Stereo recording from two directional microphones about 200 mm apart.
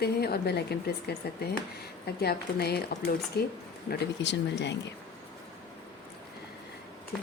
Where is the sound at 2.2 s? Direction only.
50° left (ahead or behind).